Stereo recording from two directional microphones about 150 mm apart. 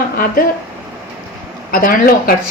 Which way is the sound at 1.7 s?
70° left (ahead or behind).